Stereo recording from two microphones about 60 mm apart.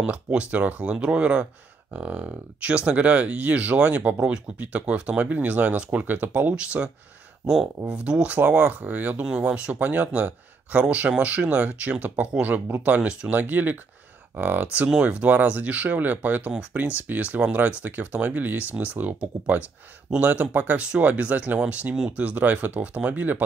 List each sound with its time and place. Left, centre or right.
0.0 s speech: right
7.9 s speech: centre